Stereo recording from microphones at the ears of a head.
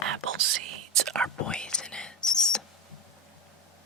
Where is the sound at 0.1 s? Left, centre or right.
Right.